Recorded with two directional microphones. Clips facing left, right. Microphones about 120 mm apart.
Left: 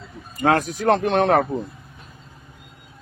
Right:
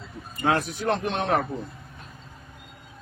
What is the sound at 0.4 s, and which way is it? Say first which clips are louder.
Speech: left 5 dB; 40° left (ahead or behind).